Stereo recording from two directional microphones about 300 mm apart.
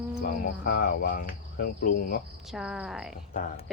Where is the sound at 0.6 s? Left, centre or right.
Left.